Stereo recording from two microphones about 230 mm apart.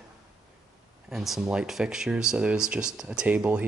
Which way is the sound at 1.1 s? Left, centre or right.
Centre.